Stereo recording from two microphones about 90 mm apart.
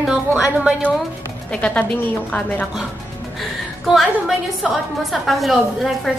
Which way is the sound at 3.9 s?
5° right (ahead or behind).